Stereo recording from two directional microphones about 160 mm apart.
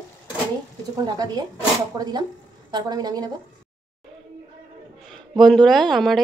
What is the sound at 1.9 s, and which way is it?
A woman's voice, 25° right (ahead or behind).